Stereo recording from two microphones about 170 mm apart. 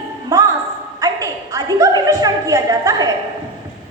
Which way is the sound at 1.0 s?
20° right (ahead or behind).